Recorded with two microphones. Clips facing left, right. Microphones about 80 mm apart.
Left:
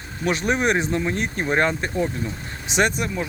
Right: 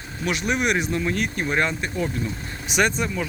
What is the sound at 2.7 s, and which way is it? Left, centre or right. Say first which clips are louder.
Speech: left 1 dB; left.